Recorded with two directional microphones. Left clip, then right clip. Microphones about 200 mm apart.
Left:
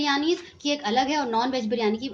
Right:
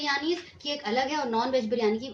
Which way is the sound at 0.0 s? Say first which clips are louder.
Left 4 dB; 45° left (ahead or behind).